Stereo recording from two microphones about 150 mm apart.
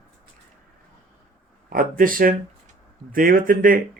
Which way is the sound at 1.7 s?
70° right (ahead or behind).